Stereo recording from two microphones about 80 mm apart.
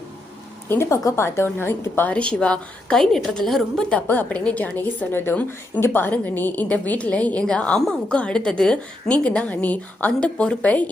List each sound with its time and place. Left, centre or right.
0.7 s a woman's voice: left; by 4.0 s centre
4.0 s a woman's voice: left